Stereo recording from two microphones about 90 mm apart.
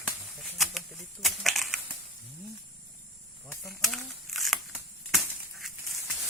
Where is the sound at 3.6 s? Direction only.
Centre (ahead or behind).